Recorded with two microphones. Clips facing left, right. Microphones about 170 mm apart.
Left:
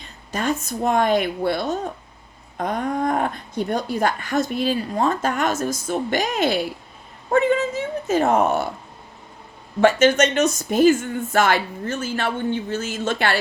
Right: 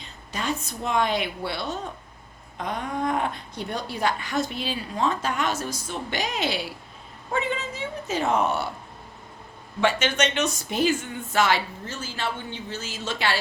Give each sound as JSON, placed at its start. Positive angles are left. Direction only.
{"t": 0.3, "sound": "speech", "side_deg": 50}
{"t": 9.8, "sound": "speech", "side_deg": 45}